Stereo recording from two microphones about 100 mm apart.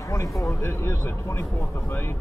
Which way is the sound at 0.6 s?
25° left (ahead or behind).